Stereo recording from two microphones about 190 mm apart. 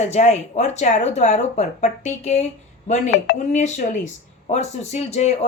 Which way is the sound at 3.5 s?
40° left (ahead or behind).